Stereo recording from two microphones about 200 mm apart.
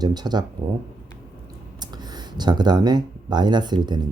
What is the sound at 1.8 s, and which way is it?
Speech, 20° right (ahead or behind).